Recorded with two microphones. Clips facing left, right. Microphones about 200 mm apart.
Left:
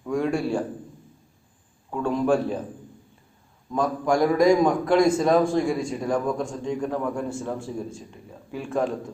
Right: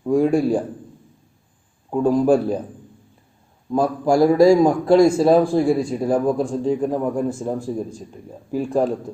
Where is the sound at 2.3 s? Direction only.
40° right (ahead or behind).